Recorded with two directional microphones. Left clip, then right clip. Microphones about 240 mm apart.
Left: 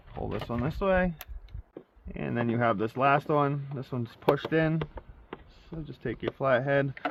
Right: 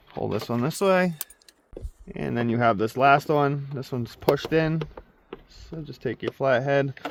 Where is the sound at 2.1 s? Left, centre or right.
Right.